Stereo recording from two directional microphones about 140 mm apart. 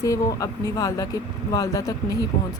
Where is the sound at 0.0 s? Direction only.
25° left (ahead or behind).